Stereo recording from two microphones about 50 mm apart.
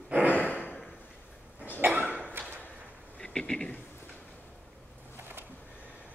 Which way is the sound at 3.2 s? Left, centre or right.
Centre.